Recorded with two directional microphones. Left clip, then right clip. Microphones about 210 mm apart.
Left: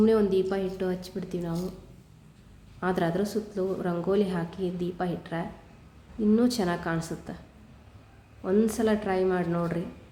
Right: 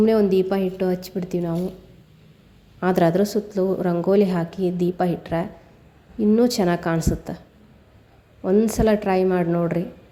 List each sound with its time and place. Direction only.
0.0 s a woman's voice: 25° right (ahead or behind)
2.8 s a woman's voice: 30° right (ahead or behind)